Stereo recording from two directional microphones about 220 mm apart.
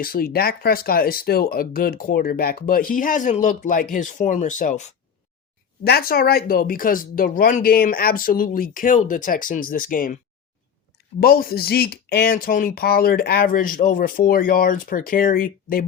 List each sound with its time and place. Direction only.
0.0 s speech: 40° left (ahead or behind)
5.8 s speech: 45° left (ahead or behind)
11.2 s speech: 40° left (ahead or behind)